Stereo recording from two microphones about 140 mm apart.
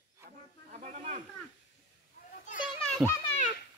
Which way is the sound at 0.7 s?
55° right (ahead or behind).